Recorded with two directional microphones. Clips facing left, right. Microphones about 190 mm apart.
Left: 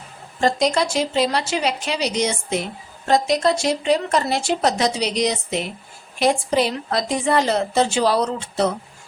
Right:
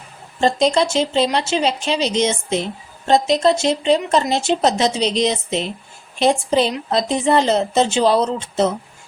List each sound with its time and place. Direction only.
0.3 s speech: 25° right (ahead or behind)